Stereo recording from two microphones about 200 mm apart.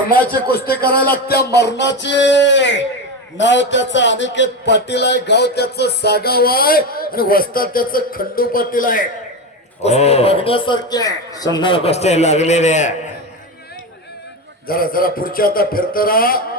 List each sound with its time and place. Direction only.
0.5 s a man's voice: 50° left (ahead or behind)
1.5 s a man's voice: 60° left (ahead or behind); by 9.0 s 45° left (ahead or behind)
9.8 s a man's voice: 30° left (ahead or behind)
14.7 s a man's voice: 45° left (ahead or behind)